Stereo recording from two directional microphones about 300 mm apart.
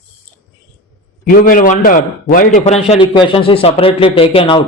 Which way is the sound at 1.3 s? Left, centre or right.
Left.